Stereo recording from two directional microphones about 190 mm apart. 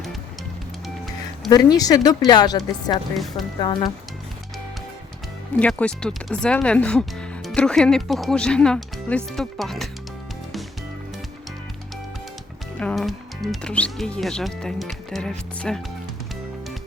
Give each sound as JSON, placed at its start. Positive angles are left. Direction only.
{"t": 1.5, "sound": "speech", "side_deg": 20}
{"t": 5.5, "sound": "speech", "side_deg": 5}
{"t": 12.8, "sound": "speech", "side_deg": 5}